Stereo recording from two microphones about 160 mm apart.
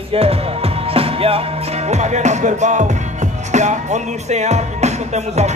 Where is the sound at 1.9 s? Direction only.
45° right (ahead or behind).